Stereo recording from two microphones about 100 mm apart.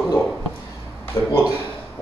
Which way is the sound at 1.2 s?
30° left (ahead or behind).